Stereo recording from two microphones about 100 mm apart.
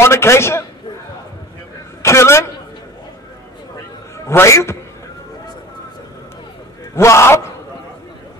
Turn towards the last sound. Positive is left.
turn(degrees=25)  # may be behind; listen again after turning